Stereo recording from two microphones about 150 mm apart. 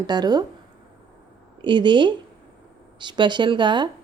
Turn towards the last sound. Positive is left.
turn(degrees=-30)  # may be behind; listen again after turning